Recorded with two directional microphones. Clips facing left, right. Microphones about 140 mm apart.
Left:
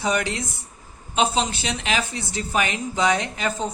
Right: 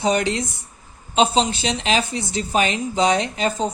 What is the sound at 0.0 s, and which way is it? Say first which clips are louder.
A woman's voice: right 4 dB; 25° right (ahead or behind).